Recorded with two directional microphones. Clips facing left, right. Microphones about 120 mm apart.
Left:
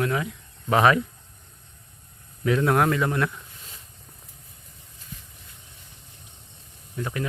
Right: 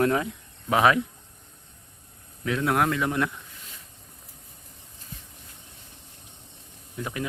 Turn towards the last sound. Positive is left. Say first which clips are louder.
# left 2 dB
turn(degrees=-10)  # may be behind; listen again after turning